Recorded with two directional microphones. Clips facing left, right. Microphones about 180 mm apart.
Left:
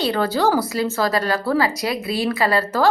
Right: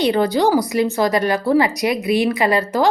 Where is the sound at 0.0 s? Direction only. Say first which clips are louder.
Right 3 dB; 15° right (ahead or behind).